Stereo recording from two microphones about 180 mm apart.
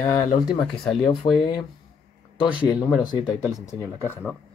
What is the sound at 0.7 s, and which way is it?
Speech, centre (ahead or behind).